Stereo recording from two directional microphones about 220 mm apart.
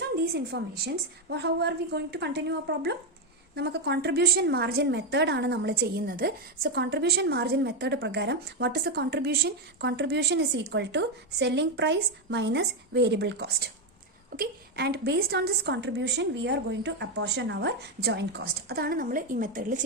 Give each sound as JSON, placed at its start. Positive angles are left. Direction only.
{"t": 0.3, "sound": "a woman's voice", "side_deg": -50}